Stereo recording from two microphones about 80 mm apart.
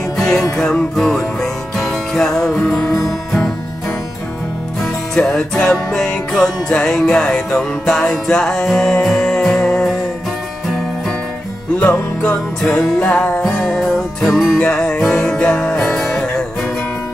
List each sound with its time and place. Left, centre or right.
0.5 s music: centre
5.1 s music: centre
11.8 s music: centre
13.4 s music: centre
14.6 s music: centre
16.0 s music: centre